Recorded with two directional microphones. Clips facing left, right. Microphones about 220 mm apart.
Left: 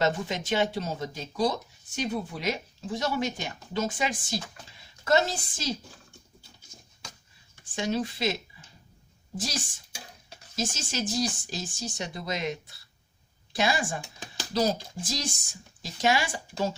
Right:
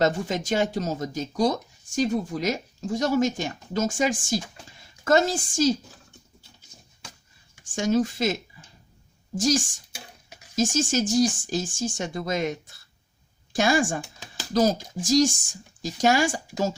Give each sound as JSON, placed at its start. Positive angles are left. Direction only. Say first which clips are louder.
{"t": 0.0, "sound": "speech", "louder": "right 4 dB", "side_deg": -45}
{"t": 7.6, "sound": "speech", "louder": "right 6 dB", "side_deg": -45}